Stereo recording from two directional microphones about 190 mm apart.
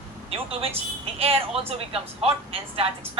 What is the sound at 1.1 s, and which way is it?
A woman's voice, 30° right (ahead or behind).